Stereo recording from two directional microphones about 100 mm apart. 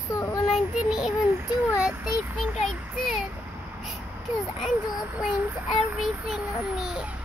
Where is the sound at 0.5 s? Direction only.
5° right (ahead or behind).